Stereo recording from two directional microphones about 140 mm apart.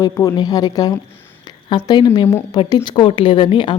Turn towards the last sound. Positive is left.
turn(degrees=35)  # may be behind; listen again after turning